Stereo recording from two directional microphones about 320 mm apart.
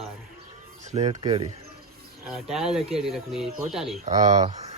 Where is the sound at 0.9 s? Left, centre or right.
Centre.